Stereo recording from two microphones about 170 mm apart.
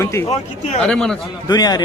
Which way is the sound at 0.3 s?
40° left (ahead or behind).